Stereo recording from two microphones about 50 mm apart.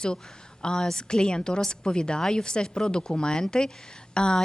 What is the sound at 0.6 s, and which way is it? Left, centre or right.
Speech, centre.